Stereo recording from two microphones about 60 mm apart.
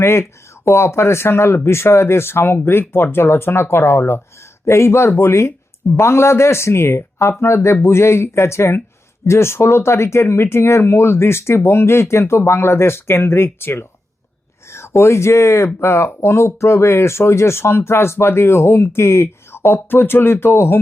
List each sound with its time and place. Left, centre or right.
0.0 s speech: left